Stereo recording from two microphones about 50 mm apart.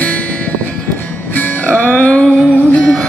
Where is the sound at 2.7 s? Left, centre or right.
Centre.